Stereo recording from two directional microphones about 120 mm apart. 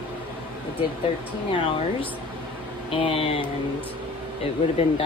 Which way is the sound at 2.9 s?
50° left (ahead or behind).